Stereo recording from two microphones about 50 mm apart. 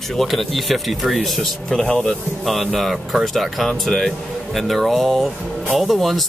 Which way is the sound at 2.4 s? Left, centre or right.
Centre.